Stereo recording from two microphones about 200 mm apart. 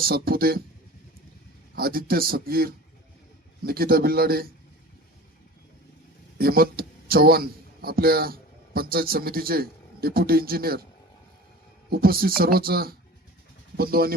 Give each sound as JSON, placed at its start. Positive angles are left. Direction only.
{"t": 0.0, "sound": "a man's voice", "side_deg": -50}
{"t": 1.7, "sound": "a man's voice", "side_deg": -50}
{"t": 6.4, "sound": "a man's voice", "side_deg": -50}
{"t": 11.9, "sound": "a man's voice", "side_deg": -50}